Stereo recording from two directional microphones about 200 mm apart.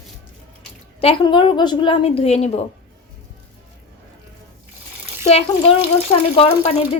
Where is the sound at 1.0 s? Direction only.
25° left (ahead or behind).